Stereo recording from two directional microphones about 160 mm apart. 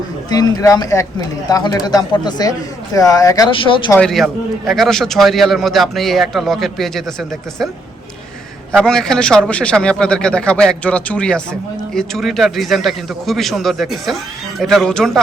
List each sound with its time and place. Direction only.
0.3 s speech: 25° left (ahead or behind)
3.9 s a man's voice: 5° left (ahead or behind)
8.8 s a man's voice: 5° left (ahead or behind)